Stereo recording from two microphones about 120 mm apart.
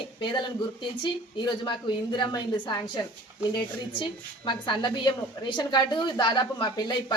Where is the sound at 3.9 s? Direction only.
40° left (ahead or behind).